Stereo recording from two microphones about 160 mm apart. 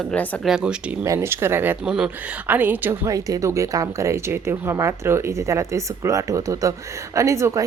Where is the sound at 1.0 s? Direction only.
15° right (ahead or behind).